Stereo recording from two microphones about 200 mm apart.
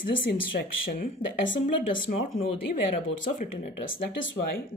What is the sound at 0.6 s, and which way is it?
Speech, 55° left (ahead or behind).